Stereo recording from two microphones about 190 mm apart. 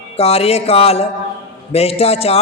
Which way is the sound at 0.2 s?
30° left (ahead or behind).